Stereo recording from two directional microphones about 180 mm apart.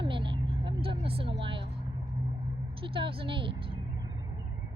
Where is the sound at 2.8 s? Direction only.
30° right (ahead or behind).